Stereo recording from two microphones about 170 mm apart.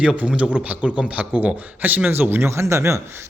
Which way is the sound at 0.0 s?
5° right (ahead or behind).